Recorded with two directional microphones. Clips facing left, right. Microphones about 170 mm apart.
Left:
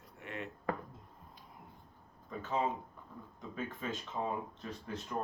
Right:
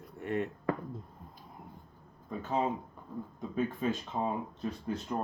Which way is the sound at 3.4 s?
35° right (ahead or behind).